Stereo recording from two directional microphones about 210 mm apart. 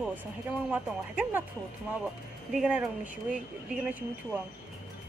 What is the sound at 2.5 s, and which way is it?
Speech, 5° right (ahead or behind).